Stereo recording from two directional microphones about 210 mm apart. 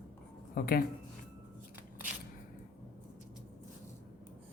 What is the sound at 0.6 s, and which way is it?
Speech, 45° left (ahead or behind).